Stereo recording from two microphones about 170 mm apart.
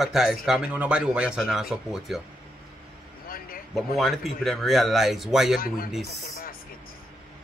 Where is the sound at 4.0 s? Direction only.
Centre (ahead or behind).